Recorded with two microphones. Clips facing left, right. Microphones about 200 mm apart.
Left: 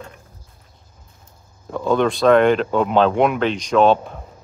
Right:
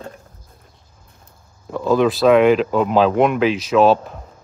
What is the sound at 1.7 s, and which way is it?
A man's voice, centre (ahead or behind).